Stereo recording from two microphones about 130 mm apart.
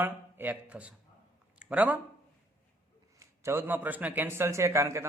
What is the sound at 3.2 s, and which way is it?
Speech, 20° right (ahead or behind).